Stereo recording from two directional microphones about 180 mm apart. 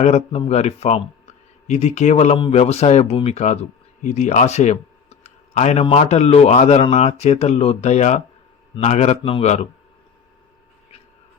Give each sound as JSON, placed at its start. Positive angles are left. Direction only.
{"t": 0.0, "sound": "speech", "side_deg": 35}